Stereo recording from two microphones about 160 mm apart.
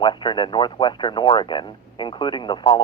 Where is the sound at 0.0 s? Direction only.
30° left (ahead or behind).